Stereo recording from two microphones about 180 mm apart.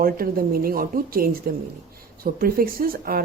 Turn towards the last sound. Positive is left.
turn(degrees=-55)  # may be behind; listen again after turning